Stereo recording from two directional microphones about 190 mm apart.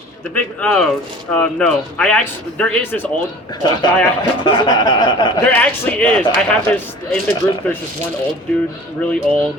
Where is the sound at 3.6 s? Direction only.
25° left (ahead or behind).